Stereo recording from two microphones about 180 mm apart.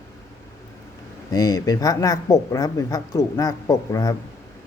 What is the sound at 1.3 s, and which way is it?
Speech, 20° left (ahead or behind).